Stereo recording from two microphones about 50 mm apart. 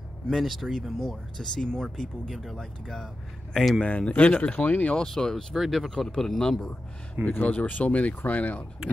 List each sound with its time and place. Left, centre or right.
0.3 s speech: centre
1.4 s speech: centre
3.8 s speech: left
4.9 s speech: centre
7.2 s speech: left